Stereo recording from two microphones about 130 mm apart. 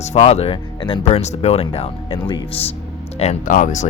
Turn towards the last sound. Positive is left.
turn(degrees=70)  # may be behind; listen again after turning